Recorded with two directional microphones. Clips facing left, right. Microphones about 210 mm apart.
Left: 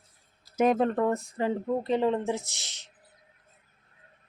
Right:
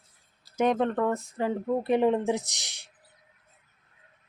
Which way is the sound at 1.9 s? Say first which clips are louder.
Right 3 dB; 15° right (ahead or behind).